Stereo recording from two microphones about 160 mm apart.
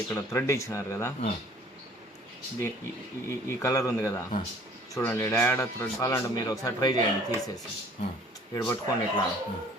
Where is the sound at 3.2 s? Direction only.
20° left (ahead or behind).